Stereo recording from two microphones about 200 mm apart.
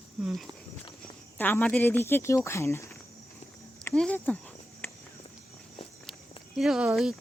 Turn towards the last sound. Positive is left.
turn(degrees=-5)  # may be behind; listen again after turning